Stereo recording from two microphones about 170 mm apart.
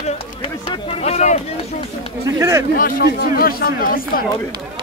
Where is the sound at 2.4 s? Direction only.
15° right (ahead or behind).